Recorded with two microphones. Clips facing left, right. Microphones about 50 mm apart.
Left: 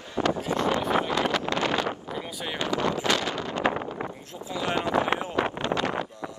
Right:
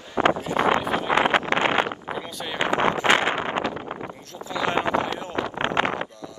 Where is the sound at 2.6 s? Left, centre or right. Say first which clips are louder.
Right 5 dB; right.